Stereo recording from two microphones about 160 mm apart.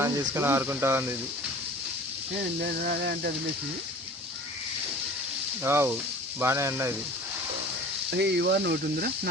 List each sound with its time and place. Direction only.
0.0 s speech: 15° right (ahead or behind)
2.8 s a sound: 75° right (ahead or behind)
5.6 s speech: 15° right (ahead or behind)
8.1 s speech: 90° right